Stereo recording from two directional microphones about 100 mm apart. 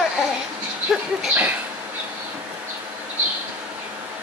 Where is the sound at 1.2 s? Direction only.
15° right (ahead or behind).